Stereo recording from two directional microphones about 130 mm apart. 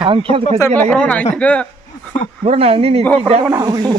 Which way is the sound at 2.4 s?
50° right (ahead or behind).